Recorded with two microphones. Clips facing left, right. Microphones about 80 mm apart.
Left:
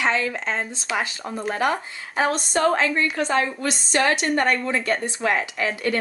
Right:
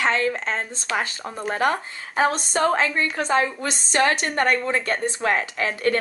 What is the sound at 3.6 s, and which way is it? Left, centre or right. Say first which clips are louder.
Speech: even; right.